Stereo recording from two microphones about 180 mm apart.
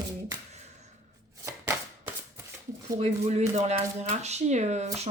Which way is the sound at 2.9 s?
35° right (ahead or behind).